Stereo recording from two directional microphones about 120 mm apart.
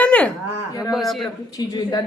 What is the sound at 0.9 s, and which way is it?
Speech, centre (ahead or behind).